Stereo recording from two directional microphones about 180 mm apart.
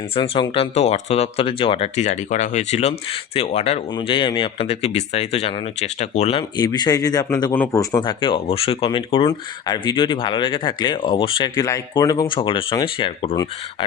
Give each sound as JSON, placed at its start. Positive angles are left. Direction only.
{"t": 0.2, "sound": "speech", "side_deg": 25}
{"t": 6.6, "sound": "speech", "side_deg": 20}